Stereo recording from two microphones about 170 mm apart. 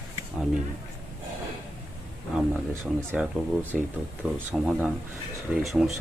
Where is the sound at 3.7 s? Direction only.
Centre (ahead or behind).